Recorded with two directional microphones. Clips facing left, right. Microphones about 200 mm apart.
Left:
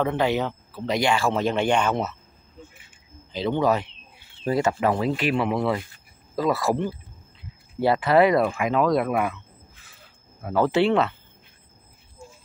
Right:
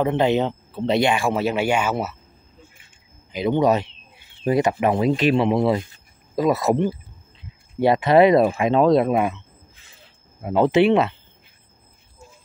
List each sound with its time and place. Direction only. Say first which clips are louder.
0.0 s speech: right 4 dB; 20° right (ahead or behind)
3.3 s speech: right 4 dB; 15° right (ahead or behind)
10.4 s speech: right 4 dB; 20° right (ahead or behind)